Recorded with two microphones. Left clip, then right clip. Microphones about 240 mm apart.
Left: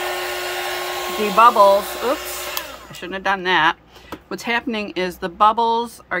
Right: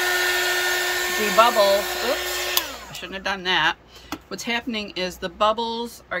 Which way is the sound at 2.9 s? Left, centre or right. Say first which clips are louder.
Left 9 dB; centre.